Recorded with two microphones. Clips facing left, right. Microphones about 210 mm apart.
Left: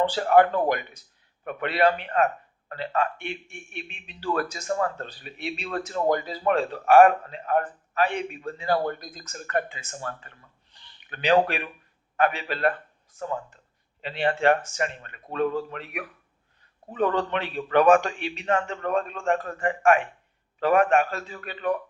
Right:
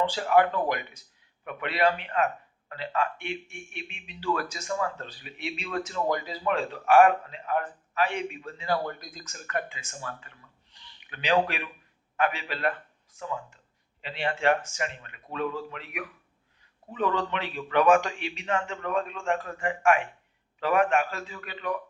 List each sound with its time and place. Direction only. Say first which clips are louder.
0.1 s a man's voice: left 4 dB; 40° left (ahead or behind)